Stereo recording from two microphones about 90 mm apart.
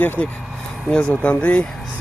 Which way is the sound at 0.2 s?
15° left (ahead or behind).